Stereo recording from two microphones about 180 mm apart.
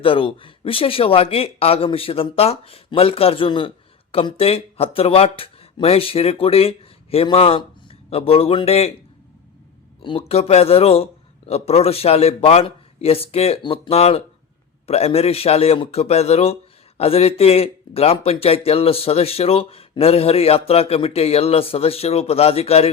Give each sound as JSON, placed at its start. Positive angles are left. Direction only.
{"t": 0.0, "sound": "speech", "side_deg": 30}
{"t": 10.0, "sound": "speech", "side_deg": 30}